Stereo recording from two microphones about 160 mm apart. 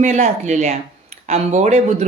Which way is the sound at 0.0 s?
50° right (ahead or behind).